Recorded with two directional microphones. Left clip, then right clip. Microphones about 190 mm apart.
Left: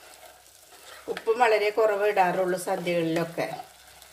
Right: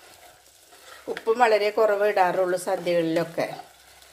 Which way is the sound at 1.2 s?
35° right (ahead or behind).